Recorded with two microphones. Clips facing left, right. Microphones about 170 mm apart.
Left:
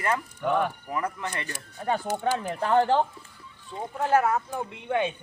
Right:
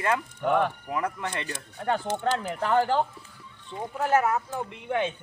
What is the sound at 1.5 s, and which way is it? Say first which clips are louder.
Speech: even; 10° left (ahead or behind).